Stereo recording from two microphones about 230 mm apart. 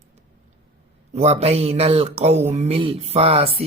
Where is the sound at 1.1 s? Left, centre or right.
Right.